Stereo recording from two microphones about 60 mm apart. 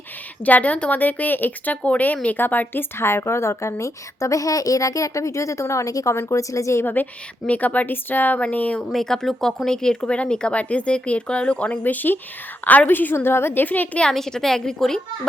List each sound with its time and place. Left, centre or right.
0.4 s a woman's voice: left
3.0 s a woman's voice: left
6.2 s a woman's voice: left
6.8 s speech: left
8.9 s speech: centre; by 13.1 s left
13.1 s a woman's voice: left
14.0 s a child's voice: centre